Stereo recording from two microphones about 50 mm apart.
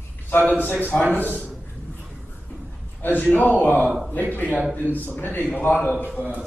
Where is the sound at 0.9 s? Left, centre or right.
Left.